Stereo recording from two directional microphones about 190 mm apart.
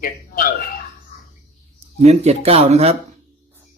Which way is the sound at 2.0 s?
35° right (ahead or behind).